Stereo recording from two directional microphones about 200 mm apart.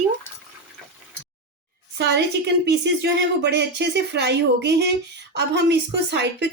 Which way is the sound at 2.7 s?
60° right (ahead or behind).